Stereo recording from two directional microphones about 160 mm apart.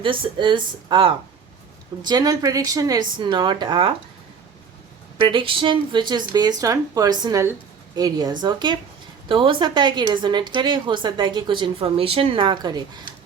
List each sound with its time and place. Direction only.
0.0 s a woman's voice: 30° right (ahead or behind)
5.2 s a woman's voice: 30° right (ahead or behind)